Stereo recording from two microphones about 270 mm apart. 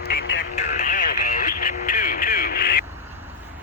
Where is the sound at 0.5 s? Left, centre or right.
Left.